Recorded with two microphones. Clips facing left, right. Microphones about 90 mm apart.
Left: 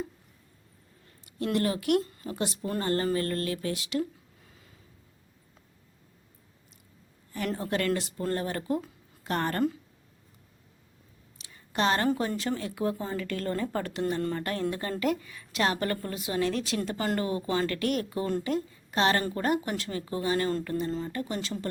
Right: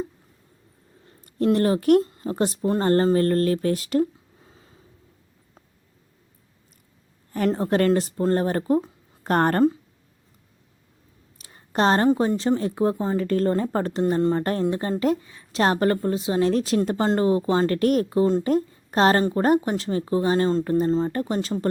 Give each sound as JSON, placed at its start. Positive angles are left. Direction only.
{"t": 1.5, "sound": "speech", "side_deg": -35}
{"t": 2.0, "sound": "a sound", "side_deg": -25}
{"t": 2.3, "sound": "speech", "side_deg": -40}
{"t": 4.4, "sound": "a sound", "side_deg": -30}
{"t": 7.3, "sound": "speech", "side_deg": -35}
{"t": 9.2, "sound": "a woman's voice", "side_deg": -45}
{"t": 11.3, "sound": "a sound", "side_deg": -40}
{"t": 12.0, "sound": "speech", "side_deg": -25}
{"t": 14.2, "sound": "a woman's voice", "side_deg": -25}
{"t": 18.4, "sound": "a woman's voice", "side_deg": -40}
{"t": 20.7, "sound": "speech", "side_deg": -40}